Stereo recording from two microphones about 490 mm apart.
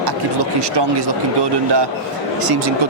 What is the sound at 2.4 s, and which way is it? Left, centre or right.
Speech, right.